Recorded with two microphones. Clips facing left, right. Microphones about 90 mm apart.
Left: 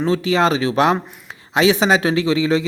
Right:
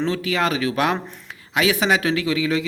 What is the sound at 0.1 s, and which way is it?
A man's voice, 25° left (ahead or behind).